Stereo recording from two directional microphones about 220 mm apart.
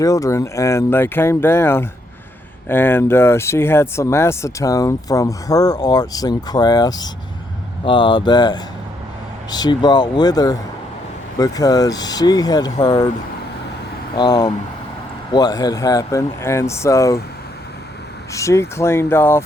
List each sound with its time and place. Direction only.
0.0 s speech: 15° left (ahead or behind)
14.2 s speech: 15° left (ahead or behind)
18.3 s speech: 15° left (ahead or behind)